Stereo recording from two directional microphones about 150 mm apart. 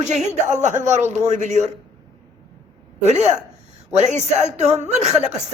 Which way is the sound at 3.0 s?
50° right (ahead or behind).